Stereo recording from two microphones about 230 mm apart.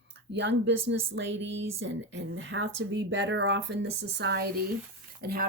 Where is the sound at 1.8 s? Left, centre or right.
Right.